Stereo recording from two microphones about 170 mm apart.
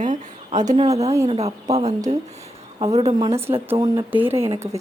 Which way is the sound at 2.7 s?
25° right (ahead or behind).